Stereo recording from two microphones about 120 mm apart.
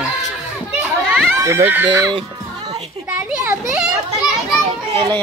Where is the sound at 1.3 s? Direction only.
25° right (ahead or behind).